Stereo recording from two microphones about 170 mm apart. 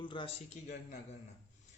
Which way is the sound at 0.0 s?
30° left (ahead or behind).